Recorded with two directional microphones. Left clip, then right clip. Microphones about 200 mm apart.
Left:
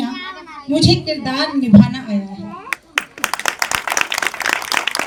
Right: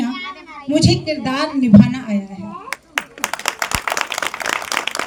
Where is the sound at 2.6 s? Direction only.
60° right (ahead or behind).